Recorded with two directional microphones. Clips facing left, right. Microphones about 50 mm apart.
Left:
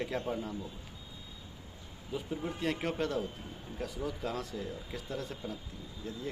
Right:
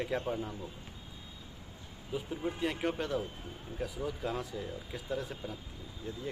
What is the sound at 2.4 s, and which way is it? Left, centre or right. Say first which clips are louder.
Speech: right 2 dB; centre.